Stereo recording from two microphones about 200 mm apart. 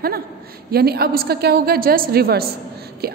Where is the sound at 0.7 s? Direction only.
50° right (ahead or behind).